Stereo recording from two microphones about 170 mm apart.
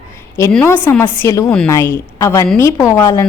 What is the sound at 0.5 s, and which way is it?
A woman's voice, 10° left (ahead or behind).